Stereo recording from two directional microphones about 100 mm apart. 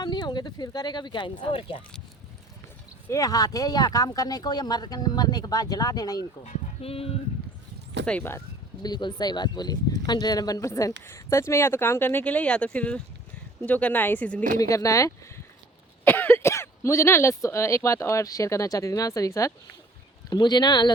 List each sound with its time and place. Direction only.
0.0 s speech: 45° left (ahead or behind); by 1.8 s 65° left (ahead or behind)
3.1 s speech: 35° left (ahead or behind)
6.8 s speech: 75° left (ahead or behind)
8.0 s speech: 10° left (ahead or behind)
8.8 s speech: 45° left (ahead or behind); by 14.4 s 15° left (ahead or behind)
14.6 s speech: 35° left (ahead or behind)
16.0 s speech: 20° left (ahead or behind)
20.3 s speech: 45° left (ahead or behind)